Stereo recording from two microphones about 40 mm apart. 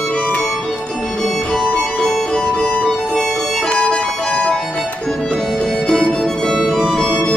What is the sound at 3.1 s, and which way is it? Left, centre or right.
Music, centre.